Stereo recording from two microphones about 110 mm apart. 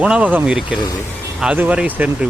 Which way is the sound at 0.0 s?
10° right (ahead or behind).